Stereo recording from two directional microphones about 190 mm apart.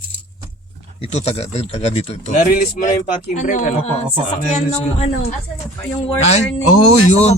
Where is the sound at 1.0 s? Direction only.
30° left (ahead or behind).